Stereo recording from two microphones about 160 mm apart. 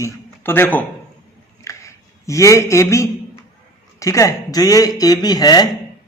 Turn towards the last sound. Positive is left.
turn(degrees=25)  # may be behind; listen again after turning